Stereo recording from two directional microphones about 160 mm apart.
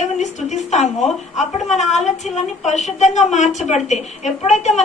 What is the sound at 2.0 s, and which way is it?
A woman's voice, 45° left (ahead or behind).